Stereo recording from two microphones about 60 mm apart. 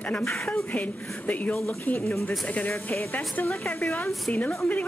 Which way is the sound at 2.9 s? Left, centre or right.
Left.